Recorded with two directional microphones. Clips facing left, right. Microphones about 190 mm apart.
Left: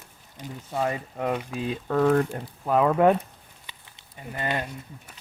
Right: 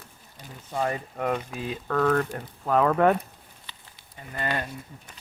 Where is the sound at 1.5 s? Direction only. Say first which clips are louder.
Left 2 dB; 25° left (ahead or behind).